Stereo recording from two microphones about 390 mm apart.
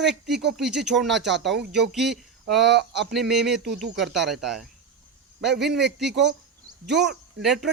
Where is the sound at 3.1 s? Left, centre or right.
Centre.